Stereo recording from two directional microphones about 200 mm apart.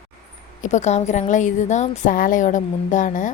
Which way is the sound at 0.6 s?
35° left (ahead or behind).